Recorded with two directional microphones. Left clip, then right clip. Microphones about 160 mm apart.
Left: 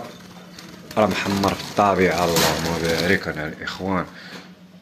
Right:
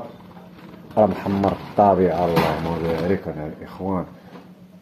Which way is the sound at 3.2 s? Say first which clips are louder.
Left 3 dB; 5° left (ahead or behind).